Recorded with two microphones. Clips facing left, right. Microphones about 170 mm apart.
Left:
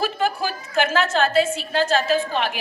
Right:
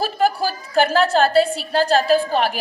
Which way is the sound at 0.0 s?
35° right (ahead or behind).